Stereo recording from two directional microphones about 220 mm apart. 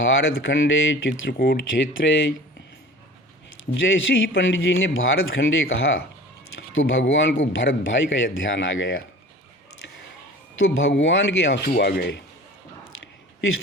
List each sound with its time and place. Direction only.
0.0 s a man's voice: 60° left (ahead or behind)
1.9 s a man's voice: 60° left (ahead or behind)
3.8 s a man's voice: 60° left (ahead or behind)
10.6 s speech: 55° left (ahead or behind)